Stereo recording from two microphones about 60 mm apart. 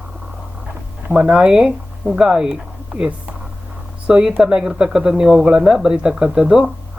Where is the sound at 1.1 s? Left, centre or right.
Centre.